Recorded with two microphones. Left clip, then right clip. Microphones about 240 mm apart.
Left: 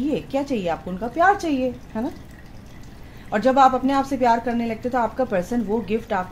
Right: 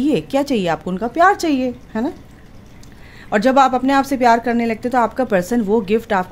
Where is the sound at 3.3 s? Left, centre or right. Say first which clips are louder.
Right 3 dB; right.